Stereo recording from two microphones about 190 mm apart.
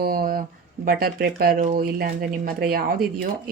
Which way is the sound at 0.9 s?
50° right (ahead or behind).